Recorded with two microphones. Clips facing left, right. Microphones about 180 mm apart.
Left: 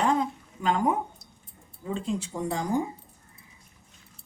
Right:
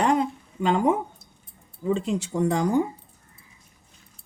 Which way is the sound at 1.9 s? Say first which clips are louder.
Right 5 dB; 75° right (ahead or behind).